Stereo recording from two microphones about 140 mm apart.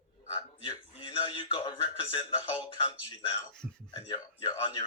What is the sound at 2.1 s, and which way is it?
Speech, 45° left (ahead or behind).